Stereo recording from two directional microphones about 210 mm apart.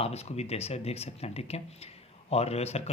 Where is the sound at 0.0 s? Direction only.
30° left (ahead or behind).